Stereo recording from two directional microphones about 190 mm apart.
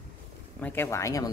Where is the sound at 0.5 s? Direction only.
10° left (ahead or behind).